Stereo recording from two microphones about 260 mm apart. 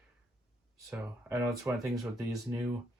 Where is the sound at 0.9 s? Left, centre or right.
Centre.